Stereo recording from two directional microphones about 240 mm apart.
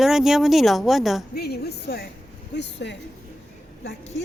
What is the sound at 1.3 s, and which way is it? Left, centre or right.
A woman's voice, left.